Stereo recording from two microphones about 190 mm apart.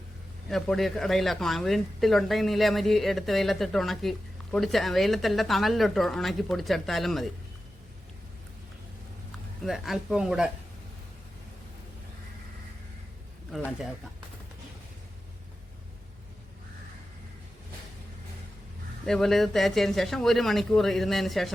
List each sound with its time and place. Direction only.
0.4 s speech: centre (ahead or behind)
9.6 s speech: centre (ahead or behind)
19.0 s speech: 5° left (ahead or behind)